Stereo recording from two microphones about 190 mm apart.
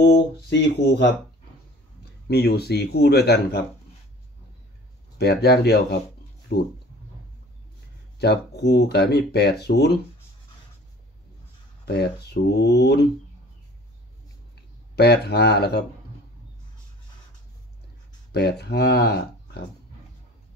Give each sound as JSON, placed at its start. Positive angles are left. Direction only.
{"t": 0.0, "sound": "speech", "side_deg": 60}
{"t": 2.2, "sound": "speech", "side_deg": 60}
{"t": 5.2, "sound": "speech", "side_deg": 60}
{"t": 8.2, "sound": "speech", "side_deg": 60}
{"t": 11.9, "sound": "speech", "side_deg": 60}
{"t": 15.0, "sound": "speech", "side_deg": 60}
{"t": 18.3, "sound": "speech", "side_deg": 60}